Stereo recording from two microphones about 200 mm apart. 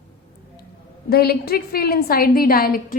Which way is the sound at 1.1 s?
50° left (ahead or behind).